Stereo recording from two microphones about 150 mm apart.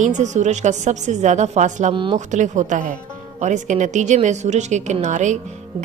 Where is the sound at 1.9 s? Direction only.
35° right (ahead or behind).